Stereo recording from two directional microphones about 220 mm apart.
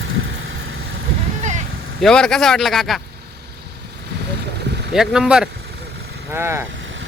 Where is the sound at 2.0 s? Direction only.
5° left (ahead or behind).